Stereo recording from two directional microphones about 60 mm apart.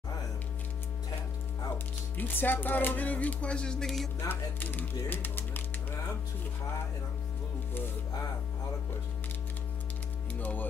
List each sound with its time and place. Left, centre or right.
2.1 s music: left; by 3.8 s centre
3.8 s music: centre
4.3 s speech: left
10.4 s music: left